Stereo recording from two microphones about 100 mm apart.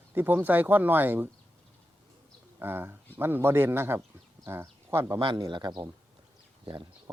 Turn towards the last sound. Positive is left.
turn(degrees=-50)  # may be behind; listen again after turning